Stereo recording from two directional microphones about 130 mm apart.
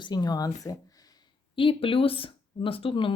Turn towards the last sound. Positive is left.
turn(degrees=40)  # may be behind; listen again after turning